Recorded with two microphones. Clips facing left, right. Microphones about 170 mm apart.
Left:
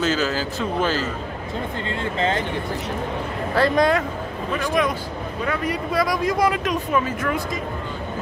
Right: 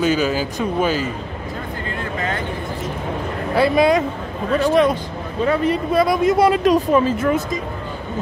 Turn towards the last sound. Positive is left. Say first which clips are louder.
# right 5 dB
turn(degrees=-25)  # may be behind; listen again after turning